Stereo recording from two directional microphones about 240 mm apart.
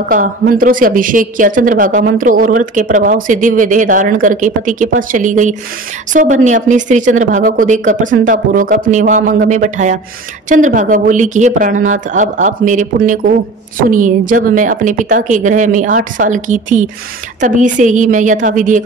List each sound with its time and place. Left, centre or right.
0.1 s speech: right